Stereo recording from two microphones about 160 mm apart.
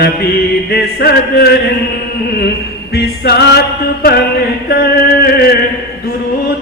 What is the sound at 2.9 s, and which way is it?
Music, 85° left.